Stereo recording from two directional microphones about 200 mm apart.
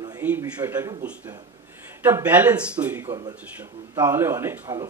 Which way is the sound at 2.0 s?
10° right (ahead or behind).